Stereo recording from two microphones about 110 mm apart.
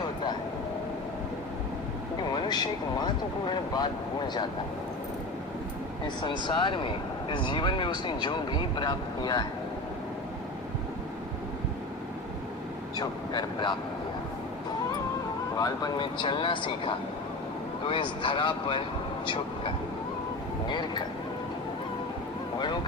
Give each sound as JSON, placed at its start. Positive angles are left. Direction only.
{"t": 2.3, "sound": "speech", "side_deg": 40}
{"t": 6.2, "sound": "speech", "side_deg": 45}
{"t": 13.0, "sound": "speech", "side_deg": 40}
{"t": 15.5, "sound": "speech", "side_deg": 35}
{"t": 22.5, "sound": "speech", "side_deg": 40}